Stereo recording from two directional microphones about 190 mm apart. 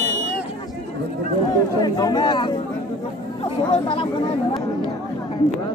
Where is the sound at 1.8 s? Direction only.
20° left (ahead or behind).